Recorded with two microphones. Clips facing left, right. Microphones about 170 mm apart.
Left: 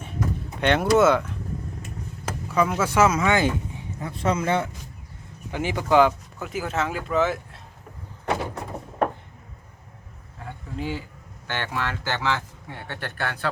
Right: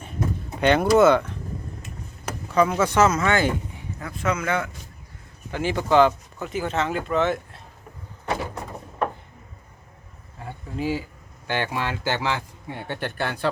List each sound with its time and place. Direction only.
0.6 s speech: centre (ahead or behind)
2.5 s speech: 5° left (ahead or behind); by 4.7 s 30° left (ahead or behind)
5.5 s speech: 15° left (ahead or behind)
10.8 s speech: 10° right (ahead or behind)